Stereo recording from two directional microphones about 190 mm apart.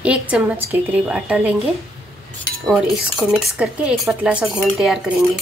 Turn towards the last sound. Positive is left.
turn(degrees=0)  # may be behind; listen again after turning